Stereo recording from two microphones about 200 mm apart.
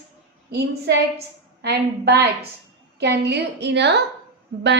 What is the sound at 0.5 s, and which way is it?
A woman's voice, 55° right (ahead or behind).